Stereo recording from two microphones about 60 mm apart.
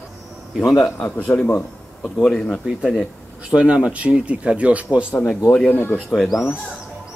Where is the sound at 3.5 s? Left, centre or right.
Centre.